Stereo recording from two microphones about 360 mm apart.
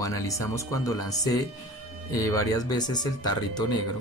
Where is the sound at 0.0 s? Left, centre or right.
Centre.